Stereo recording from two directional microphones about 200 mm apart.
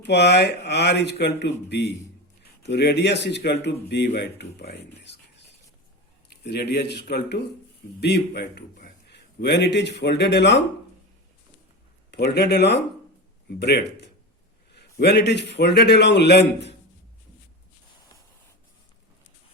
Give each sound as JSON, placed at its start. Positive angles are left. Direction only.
{"t": 0.0, "sound": "a man's voice", "side_deg": 55}
{"t": 12.1, "sound": "speech", "side_deg": 55}